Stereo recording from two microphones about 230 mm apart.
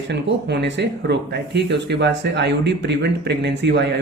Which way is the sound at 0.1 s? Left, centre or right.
Right.